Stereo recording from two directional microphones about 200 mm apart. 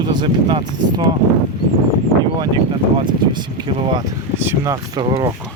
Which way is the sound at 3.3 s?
25° right (ahead or behind).